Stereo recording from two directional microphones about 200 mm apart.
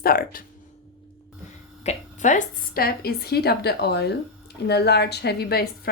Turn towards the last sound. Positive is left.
turn(degrees=50)  # may be behind; listen again after turning